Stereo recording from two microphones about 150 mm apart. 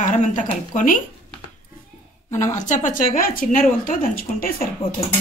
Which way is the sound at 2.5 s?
55° left (ahead or behind).